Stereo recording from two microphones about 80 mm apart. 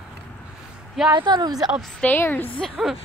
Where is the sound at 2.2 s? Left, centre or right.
Left.